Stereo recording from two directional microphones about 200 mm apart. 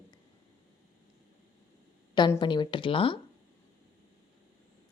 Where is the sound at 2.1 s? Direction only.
20° left (ahead or behind).